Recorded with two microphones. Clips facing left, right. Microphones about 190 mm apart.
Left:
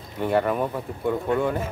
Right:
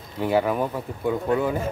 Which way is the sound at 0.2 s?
Centre (ahead or behind).